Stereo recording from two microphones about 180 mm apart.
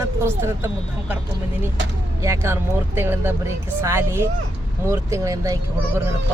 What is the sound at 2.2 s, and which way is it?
Speech, 15° right (ahead or behind).